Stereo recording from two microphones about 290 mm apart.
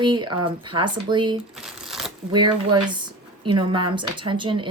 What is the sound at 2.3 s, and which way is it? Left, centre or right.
Speech, centre.